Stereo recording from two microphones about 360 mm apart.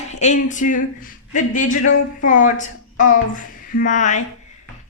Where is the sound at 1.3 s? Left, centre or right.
Left.